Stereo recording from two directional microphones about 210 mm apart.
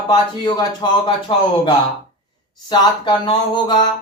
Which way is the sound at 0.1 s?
20° left (ahead or behind).